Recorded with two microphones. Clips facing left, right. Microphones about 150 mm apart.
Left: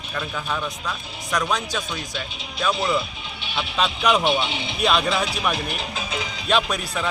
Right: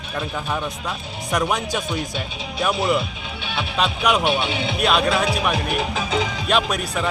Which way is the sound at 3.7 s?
5° right (ahead or behind).